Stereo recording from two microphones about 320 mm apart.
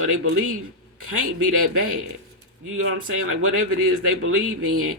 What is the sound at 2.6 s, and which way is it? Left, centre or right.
Speech, right.